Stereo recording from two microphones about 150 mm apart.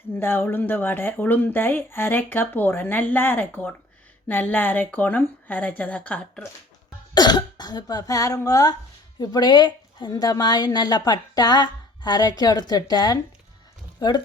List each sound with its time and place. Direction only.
0.2 s speech: 15° left (ahead or behind)
7.1 s a woman's voice: 30° left (ahead or behind)